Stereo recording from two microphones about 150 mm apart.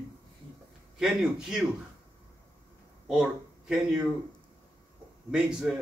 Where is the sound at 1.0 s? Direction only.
Centre (ahead or behind).